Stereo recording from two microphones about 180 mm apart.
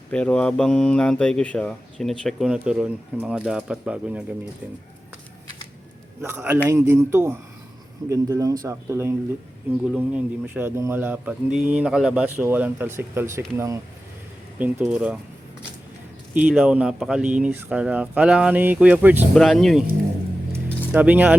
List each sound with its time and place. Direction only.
0.1 s speech: 5° left (ahead or behind)
6.2 s speech: 10° right (ahead or behind)
14.6 s speech: 10° right (ahead or behind)
16.3 s speech: 5° right (ahead or behind)
20.9 s speech: 10° right (ahead or behind)